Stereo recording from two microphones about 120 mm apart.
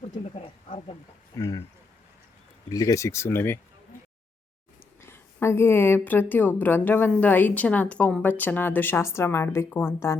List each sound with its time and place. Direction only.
1.4 s speech: 30° left (ahead or behind)
2.6 s speech: 30° left (ahead or behind)
4.9 s a woman's voice: 20° left (ahead or behind)